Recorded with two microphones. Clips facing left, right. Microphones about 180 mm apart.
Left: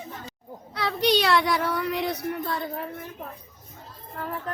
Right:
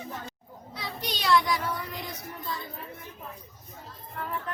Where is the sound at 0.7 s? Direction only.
70° left (ahead or behind).